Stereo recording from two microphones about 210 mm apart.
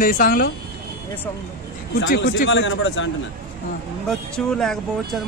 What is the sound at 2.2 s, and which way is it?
Speech, 55° left (ahead or behind).